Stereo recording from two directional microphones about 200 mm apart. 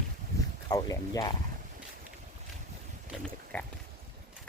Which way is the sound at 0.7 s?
20° left (ahead or behind).